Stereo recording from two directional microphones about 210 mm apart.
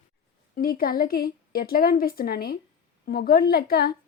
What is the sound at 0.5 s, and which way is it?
A woman's voice, 45° left (ahead or behind).